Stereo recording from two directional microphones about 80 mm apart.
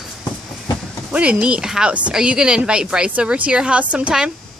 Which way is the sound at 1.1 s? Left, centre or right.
Centre.